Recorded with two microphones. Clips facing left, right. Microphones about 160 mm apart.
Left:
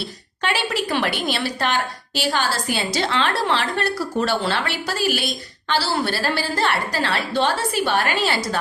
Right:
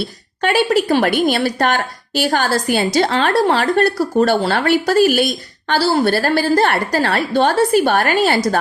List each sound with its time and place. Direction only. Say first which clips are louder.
0.4 s a woman's voice: right 9 dB; 45° right (ahead or behind)